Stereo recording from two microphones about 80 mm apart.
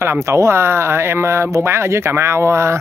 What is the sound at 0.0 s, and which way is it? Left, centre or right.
Speech, right.